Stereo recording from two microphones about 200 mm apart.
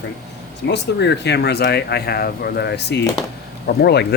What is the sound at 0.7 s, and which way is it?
Speech, 60° left (ahead or behind).